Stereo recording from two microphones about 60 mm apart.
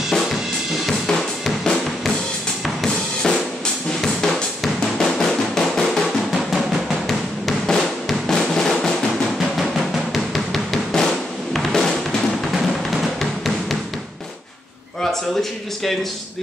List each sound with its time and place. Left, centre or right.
0.8 s drum: centre
9.6 s music: centre
11.5 s drum: centre
12.9 s music: centre